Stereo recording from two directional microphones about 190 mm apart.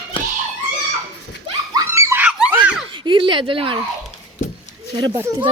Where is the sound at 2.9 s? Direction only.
25° right (ahead or behind).